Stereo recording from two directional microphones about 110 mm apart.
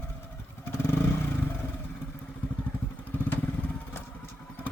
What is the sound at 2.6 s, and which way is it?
Vehicle, 15° left (ahead or behind).